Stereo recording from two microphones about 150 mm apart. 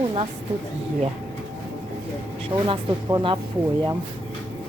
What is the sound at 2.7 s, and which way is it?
Speech, 35° right (ahead or behind).